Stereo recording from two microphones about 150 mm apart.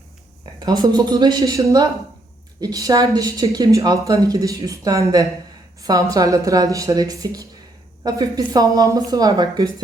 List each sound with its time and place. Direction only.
0.6 s speech: 25° right (ahead or behind)